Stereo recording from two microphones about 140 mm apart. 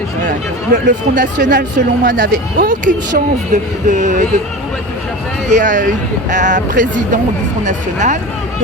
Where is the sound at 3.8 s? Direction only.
65° right (ahead or behind).